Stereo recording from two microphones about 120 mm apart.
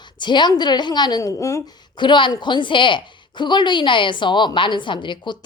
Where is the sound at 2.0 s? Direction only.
40° left (ahead or behind).